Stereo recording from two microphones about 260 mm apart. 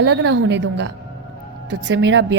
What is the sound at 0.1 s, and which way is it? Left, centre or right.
A woman's voice, right.